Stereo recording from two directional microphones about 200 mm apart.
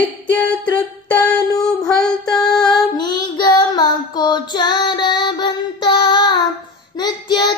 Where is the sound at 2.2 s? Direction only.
20° left (ahead or behind).